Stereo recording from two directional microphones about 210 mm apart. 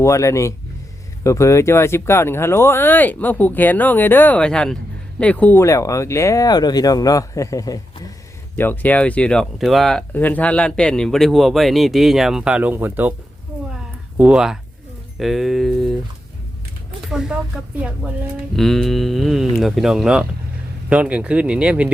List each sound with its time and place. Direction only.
0.0 s speech: 15° left (ahead or behind); by 13.1 s 10° right (ahead or behind)
14.2 s speech: 5° right (ahead or behind)
17.1 s speech: 5° right (ahead or behind)